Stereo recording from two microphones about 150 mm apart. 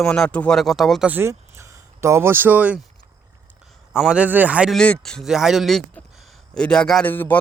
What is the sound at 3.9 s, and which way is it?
Speech, 5° right (ahead or behind).